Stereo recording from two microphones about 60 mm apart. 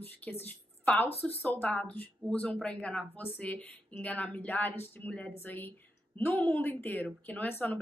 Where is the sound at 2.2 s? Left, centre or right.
Centre.